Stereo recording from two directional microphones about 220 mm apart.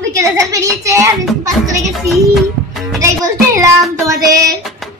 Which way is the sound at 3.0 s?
15° right (ahead or behind).